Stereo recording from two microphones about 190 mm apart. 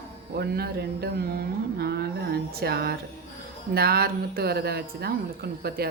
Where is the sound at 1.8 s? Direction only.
55° right (ahead or behind).